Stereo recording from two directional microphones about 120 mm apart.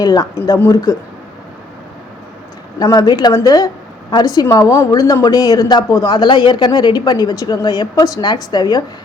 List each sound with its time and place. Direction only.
0.0 s a woman's voice: 35° left (ahead or behind)
0.3 s a woman's voice: 25° left (ahead or behind)
2.7 s a woman's voice: 30° left (ahead or behind)
6.1 s a woman's voice: 40° left (ahead or behind)